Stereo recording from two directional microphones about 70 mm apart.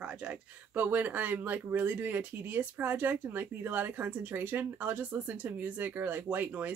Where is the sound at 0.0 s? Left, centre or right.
Centre.